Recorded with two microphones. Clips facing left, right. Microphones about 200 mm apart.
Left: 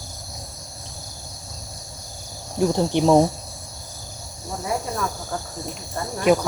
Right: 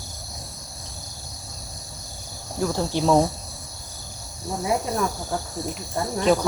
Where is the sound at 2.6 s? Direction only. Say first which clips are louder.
Left 4 dB; 20° left (ahead or behind).